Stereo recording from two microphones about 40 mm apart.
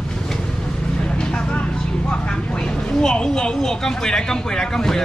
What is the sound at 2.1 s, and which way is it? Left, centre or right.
Speech, left.